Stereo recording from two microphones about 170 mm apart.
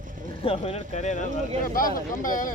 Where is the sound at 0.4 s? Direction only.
35° left (ahead or behind).